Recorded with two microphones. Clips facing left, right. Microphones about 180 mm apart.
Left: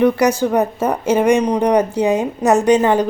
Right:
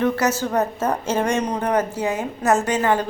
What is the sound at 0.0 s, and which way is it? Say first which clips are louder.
A woman's voice: left 6 dB; 15° left (ahead or behind).